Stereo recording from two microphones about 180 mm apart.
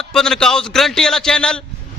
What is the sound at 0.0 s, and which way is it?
A man's voice, 5° left (ahead or behind).